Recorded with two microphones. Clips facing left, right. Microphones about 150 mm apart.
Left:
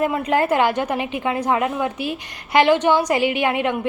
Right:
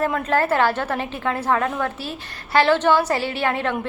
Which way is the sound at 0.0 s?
15° left (ahead or behind).